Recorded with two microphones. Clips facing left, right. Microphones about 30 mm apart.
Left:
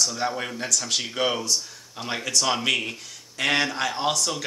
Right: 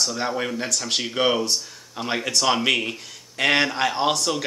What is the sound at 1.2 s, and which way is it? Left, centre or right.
Speech, right.